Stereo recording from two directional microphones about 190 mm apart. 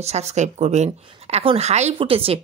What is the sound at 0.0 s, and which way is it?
A woman's voice, 35° right (ahead or behind).